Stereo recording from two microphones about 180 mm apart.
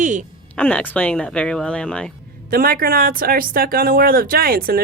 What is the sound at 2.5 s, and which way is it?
Speech, 55° right (ahead or behind).